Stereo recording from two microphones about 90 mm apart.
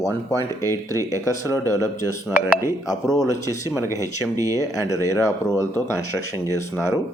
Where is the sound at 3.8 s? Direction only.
35° right (ahead or behind).